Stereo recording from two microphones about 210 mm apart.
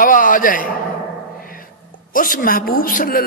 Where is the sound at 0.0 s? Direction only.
40° left (ahead or behind).